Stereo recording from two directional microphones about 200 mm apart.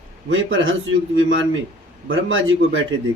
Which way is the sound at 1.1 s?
70° right (ahead or behind).